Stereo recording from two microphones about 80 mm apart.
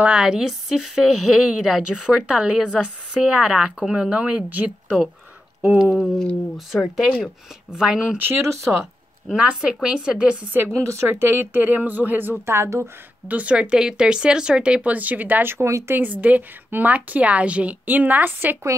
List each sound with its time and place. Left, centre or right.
0.0 s a woman's voice: centre
5.9 s speech: centre
6.5 s a woman's voice: centre
8.2 s speech: right
9.3 s a woman's voice: centre
10.7 s a woman's voice: right
13.3 s a woman's voice: centre; by 16.0 s right
16.0 s a woman's voice: centre